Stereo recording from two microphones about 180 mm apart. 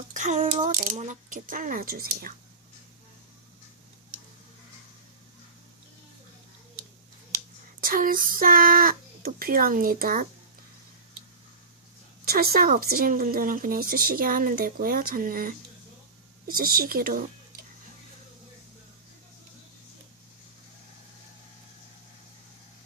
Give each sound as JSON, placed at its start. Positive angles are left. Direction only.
{"t": 0.1, "sound": "a sound", "side_deg": -40}
{"t": 0.8, "sound": "speech", "side_deg": -45}
{"t": 7.3, "sound": "child singing", "side_deg": -50}
{"t": 12.2, "sound": "speech", "side_deg": -60}